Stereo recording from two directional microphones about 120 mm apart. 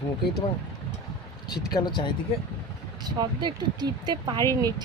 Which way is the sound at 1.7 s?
35° left (ahead or behind).